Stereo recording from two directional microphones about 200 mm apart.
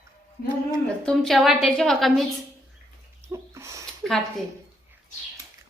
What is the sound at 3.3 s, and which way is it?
Bird, 15° right (ahead or behind).